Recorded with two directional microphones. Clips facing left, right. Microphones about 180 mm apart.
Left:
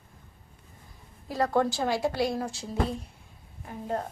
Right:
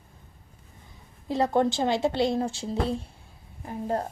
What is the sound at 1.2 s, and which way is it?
A woman's voice, 25° right (ahead or behind).